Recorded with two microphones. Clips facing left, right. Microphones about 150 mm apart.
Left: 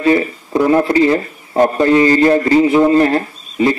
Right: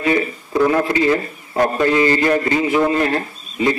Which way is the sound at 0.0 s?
35° left (ahead or behind).